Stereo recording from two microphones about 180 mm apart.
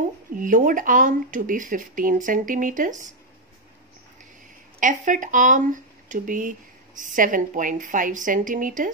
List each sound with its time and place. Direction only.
0.4 s speech: 45° right (ahead or behind)
4.7 s speech: 45° right (ahead or behind)